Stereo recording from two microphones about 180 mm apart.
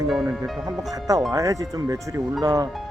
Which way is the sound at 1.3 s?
20° right (ahead or behind).